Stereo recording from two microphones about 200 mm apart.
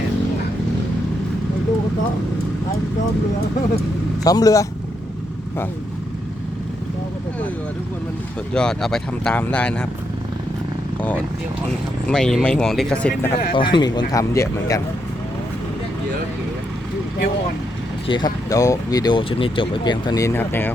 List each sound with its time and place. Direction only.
4.2 s speech: 20° left (ahead or behind)
8.5 s speech: 5° left (ahead or behind)
12.0 s speech: 5° left (ahead or behind)
13.5 s speech: 25° left (ahead or behind)
18.1 s speech: 20° left (ahead or behind)